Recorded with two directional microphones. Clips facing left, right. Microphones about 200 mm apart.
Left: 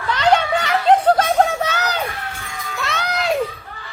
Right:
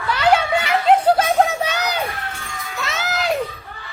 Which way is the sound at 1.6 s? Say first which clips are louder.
Even; 15° right (ahead or behind).